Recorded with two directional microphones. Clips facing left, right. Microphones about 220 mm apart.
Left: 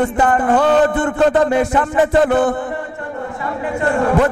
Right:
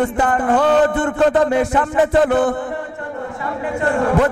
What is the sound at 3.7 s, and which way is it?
Speech, 20° left (ahead or behind).